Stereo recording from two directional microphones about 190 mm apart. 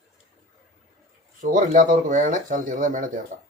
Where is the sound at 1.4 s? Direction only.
45° right (ahead or behind).